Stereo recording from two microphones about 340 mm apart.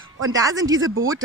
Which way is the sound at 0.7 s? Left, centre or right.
Right.